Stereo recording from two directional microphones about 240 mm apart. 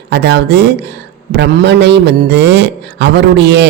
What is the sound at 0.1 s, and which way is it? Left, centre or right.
A man's voice, right.